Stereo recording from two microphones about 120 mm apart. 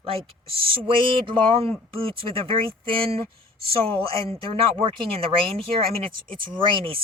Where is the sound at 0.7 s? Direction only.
45° right (ahead or behind).